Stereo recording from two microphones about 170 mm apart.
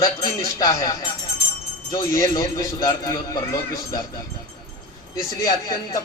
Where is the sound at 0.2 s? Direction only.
20° left (ahead or behind).